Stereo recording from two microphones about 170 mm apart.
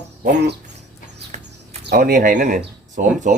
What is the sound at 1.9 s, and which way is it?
Speech, 60° right (ahead or behind).